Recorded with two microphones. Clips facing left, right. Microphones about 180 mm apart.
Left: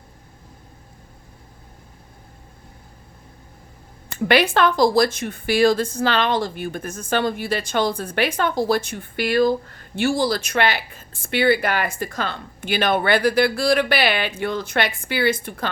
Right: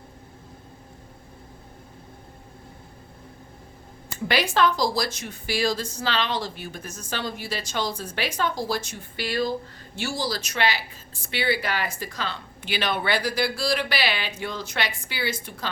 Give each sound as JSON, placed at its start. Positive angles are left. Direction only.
{"t": 4.3, "sound": "a woman's voice", "side_deg": 60}